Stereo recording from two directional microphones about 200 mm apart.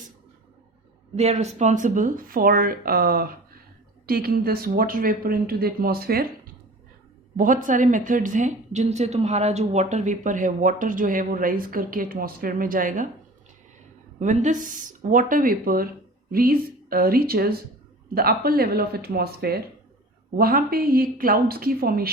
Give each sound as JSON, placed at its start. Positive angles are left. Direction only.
{"t": 1.1, "sound": "a woman's voice", "side_deg": -35}
{"t": 14.2, "sound": "a woman's voice", "side_deg": -35}